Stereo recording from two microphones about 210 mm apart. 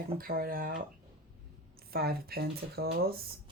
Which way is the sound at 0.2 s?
45° right (ahead or behind).